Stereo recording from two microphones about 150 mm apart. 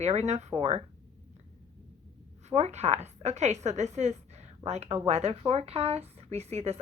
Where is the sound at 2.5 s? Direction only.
45° right (ahead or behind).